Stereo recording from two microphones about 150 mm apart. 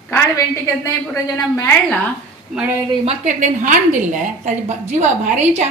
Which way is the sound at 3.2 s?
55° right (ahead or behind).